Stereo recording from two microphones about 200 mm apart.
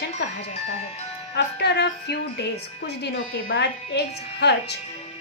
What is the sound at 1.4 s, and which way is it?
A woman's voice, 55° left (ahead or behind).